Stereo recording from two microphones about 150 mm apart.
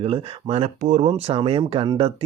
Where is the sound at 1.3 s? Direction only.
40° right (ahead or behind).